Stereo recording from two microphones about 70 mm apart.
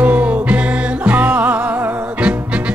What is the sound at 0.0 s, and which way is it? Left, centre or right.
Music, right.